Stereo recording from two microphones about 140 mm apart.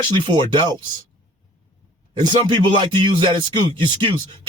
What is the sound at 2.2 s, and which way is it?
Speech, 35° right (ahead or behind).